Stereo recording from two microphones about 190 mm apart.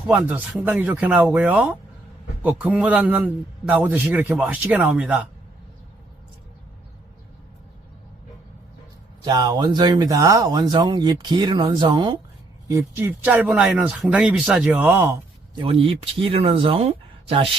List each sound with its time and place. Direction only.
0.1 s speech: 10° right (ahead or behind)
9.2 s speech: 20° right (ahead or behind)
12.6 s speech: 15° right (ahead or behind)
15.6 s speech: 30° right (ahead or behind)